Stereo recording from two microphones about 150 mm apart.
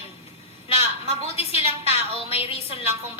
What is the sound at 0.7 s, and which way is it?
A woman's voice, 40° left (ahead or behind).